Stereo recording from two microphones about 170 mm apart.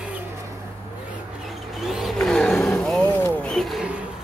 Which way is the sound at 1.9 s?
Centre (ahead or behind).